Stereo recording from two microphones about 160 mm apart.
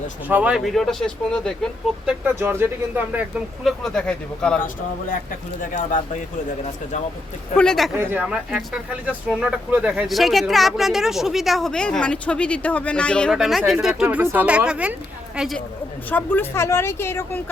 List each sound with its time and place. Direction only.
0.3 s speech: 10° right (ahead or behind)
2.0 s speech: 10° right (ahead or behind)
3.7 s speech: 5° left (ahead or behind)
5.5 s speech: 55° left (ahead or behind)
7.5 s speech: 5° left (ahead or behind)
7.9 s speech: 10° right (ahead or behind)
16.0 s speech: 10° left (ahead or behind)